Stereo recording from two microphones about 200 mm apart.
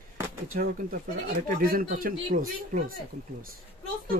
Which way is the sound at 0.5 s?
40° right (ahead or behind).